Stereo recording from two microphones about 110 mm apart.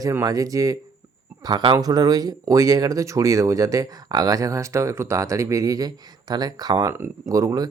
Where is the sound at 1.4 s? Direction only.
40° right (ahead or behind).